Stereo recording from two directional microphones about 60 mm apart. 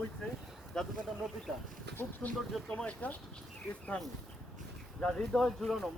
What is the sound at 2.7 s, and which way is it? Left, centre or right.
Speech, centre.